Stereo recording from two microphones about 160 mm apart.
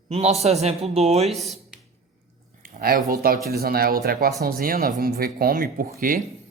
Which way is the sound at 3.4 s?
70° right (ahead or behind).